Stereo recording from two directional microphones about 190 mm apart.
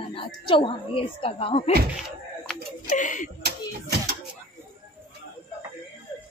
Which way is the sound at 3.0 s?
40° left (ahead or behind).